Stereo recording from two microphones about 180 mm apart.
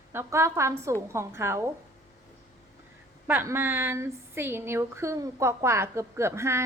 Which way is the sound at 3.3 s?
10° right (ahead or behind).